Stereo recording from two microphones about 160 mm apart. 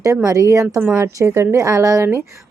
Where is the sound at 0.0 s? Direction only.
20° right (ahead or behind).